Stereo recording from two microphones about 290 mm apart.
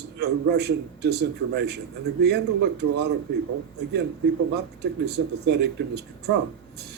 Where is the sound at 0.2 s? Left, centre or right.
Right.